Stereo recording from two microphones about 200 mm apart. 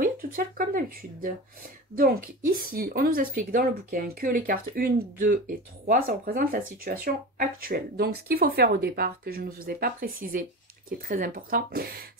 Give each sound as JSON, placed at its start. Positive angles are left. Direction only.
{"t": 0.0, "sound": "speech", "side_deg": -45}